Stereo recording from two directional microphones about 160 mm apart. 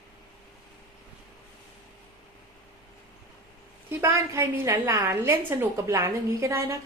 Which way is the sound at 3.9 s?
15° right (ahead or behind).